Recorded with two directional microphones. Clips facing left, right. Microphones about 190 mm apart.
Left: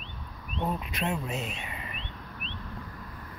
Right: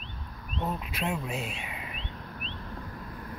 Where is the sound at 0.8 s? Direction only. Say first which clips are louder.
Left 1 dB; 5° right (ahead or behind).